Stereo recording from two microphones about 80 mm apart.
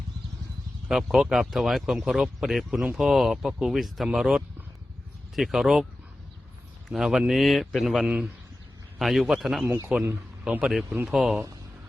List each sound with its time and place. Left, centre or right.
0.9 s speech: centre
6.8 s speech: centre
9.6 s speech: right
10.4 s speech: centre